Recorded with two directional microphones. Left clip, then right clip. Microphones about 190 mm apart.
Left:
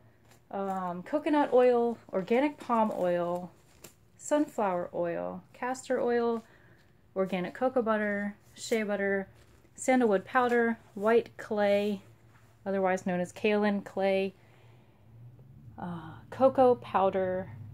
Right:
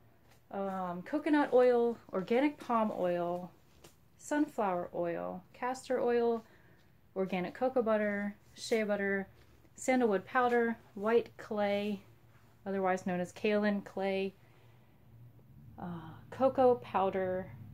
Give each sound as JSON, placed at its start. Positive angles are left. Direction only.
{"t": 0.5, "sound": "speech", "side_deg": 30}
{"t": 9.8, "sound": "speech", "side_deg": 15}
{"t": 15.7, "sound": "speech", "side_deg": 20}